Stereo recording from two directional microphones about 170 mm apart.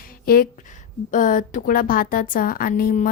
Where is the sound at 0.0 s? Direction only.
60° left (ahead or behind).